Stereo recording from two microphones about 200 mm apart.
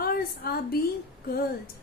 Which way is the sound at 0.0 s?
50° left (ahead or behind).